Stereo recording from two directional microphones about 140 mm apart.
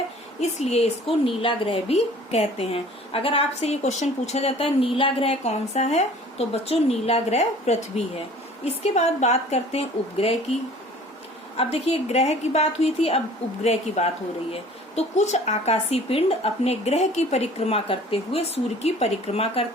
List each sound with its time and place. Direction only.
0.6 s a woman's voice: 50° left (ahead or behind)